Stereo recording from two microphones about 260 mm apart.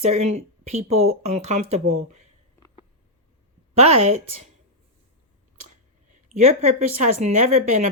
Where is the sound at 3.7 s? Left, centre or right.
Right.